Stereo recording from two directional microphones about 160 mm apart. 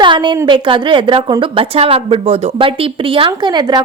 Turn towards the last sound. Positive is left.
turn(degrees=-25)  # may be behind; listen again after turning